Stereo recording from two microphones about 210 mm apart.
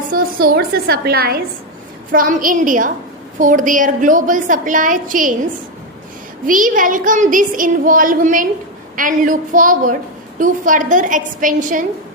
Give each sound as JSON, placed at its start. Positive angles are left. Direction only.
{"t": 0.1, "sound": "a woman's voice", "side_deg": -45}
{"t": 6.4, "sound": "speech", "side_deg": -40}